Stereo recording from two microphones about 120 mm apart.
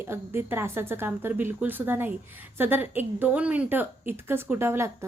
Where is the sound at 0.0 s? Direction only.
20° right (ahead or behind).